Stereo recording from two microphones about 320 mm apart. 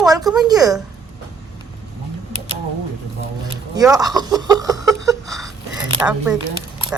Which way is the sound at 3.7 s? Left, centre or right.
Centre.